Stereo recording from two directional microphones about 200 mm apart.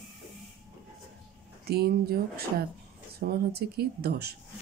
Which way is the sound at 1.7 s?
50° right (ahead or behind).